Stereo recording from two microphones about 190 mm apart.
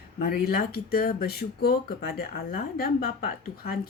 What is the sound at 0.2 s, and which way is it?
Speech, 50° left (ahead or behind).